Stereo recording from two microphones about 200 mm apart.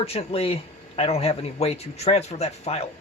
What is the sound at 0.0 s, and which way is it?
Speech, 30° left (ahead or behind).